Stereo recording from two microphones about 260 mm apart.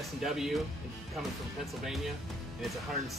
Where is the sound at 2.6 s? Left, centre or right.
Centre.